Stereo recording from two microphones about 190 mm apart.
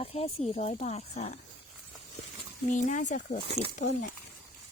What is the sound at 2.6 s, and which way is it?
Speech, 40° left (ahead or behind).